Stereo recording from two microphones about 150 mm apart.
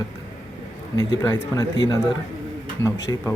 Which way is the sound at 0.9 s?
20° left (ahead or behind).